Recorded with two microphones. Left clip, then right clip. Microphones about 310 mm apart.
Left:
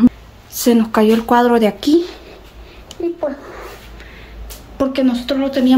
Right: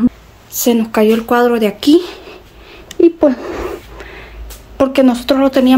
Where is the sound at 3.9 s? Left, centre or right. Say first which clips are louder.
Right 7 dB; centre.